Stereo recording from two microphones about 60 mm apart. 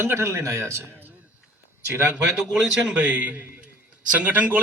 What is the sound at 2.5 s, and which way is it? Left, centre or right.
Speech, centre.